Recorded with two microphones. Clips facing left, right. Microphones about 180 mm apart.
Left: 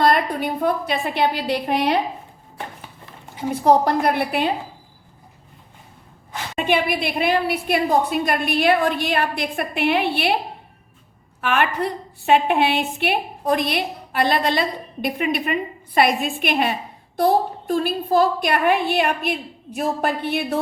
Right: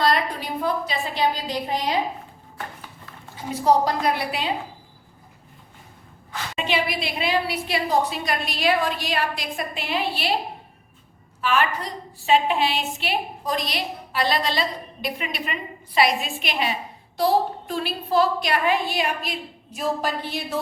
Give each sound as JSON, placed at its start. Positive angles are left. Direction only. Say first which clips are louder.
{"t": 0.0, "sound": "a woman's voice", "louder": "left 4 dB", "side_deg": 55}
{"t": 3.5, "sound": "a woman's voice", "louder": "left 3 dB", "side_deg": 55}
{"t": 6.6, "sound": "a woman's voice", "louder": "left 5 dB", "side_deg": 55}
{"t": 11.3, "sound": "a woman's voice", "louder": "left 2 dB", "side_deg": 55}